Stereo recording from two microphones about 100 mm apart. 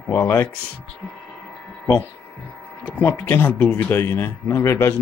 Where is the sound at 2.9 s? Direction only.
20° left (ahead or behind).